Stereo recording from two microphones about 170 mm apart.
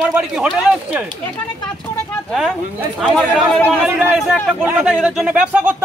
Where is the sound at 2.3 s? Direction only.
Centre (ahead or behind).